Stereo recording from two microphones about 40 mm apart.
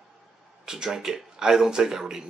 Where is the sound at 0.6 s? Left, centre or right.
Centre.